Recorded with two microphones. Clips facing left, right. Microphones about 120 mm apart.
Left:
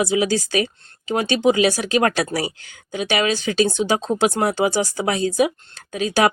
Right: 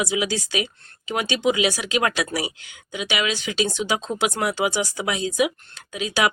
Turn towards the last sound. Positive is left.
turn(degrees=40)  # may be behind; listen again after turning